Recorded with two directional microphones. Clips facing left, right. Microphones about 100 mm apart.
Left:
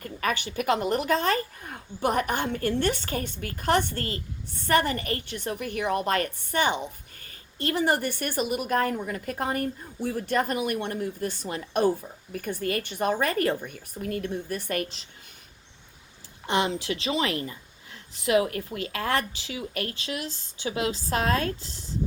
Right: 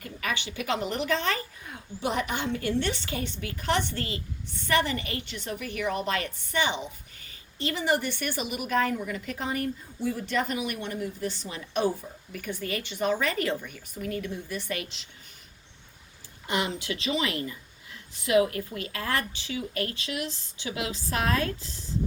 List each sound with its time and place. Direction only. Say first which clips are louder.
0.0 s speech: left 4 dB; 45° left (ahead or behind)
16.5 s a woman's voice: left 4 dB; 30° left (ahead or behind)